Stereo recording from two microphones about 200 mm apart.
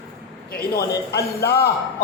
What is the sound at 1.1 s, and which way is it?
Speech, 55° left (ahead or behind).